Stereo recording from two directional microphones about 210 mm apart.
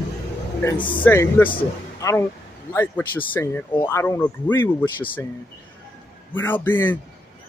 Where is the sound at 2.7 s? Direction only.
10° left (ahead or behind).